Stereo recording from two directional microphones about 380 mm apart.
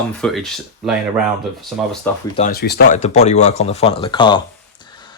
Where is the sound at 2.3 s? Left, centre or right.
Left.